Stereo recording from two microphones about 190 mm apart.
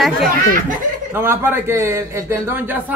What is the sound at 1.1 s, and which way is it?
Speech, 10° right (ahead or behind).